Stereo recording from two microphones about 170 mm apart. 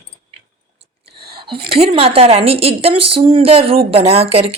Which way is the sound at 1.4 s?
30° right (ahead or behind).